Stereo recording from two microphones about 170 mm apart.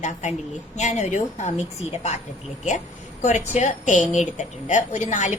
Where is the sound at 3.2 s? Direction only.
40° left (ahead or behind).